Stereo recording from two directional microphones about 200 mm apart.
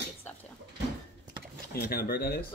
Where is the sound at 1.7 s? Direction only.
50° left (ahead or behind).